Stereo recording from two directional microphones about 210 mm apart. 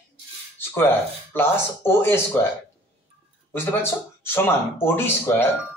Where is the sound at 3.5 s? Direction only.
10° left (ahead or behind).